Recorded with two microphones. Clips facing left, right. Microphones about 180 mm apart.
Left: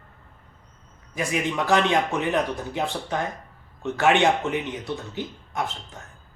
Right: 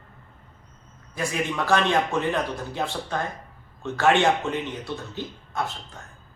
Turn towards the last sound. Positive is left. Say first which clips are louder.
# even
turn(degrees=15)  # may be behind; listen again after turning